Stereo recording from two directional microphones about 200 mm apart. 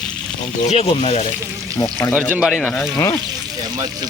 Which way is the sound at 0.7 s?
30° left (ahead or behind).